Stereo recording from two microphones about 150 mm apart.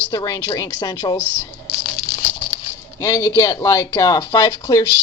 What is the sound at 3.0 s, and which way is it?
Speech, 20° left (ahead or behind).